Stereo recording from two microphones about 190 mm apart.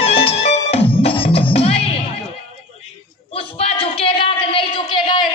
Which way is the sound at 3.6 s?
30° left (ahead or behind).